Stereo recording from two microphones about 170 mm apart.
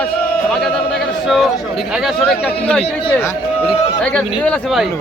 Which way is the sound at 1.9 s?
Centre (ahead or behind).